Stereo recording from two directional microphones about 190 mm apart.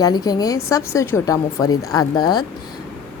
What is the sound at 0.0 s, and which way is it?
A woman's voice, 20° left (ahead or behind).